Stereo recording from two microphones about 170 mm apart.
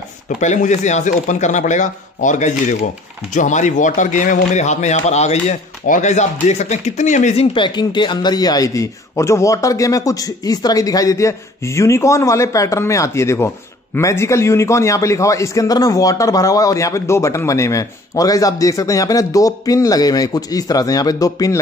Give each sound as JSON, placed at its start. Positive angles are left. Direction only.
{"t": 0.4, "sound": "a man's voice", "side_deg": 45}
{"t": 7.5, "sound": "a man's voice", "side_deg": 25}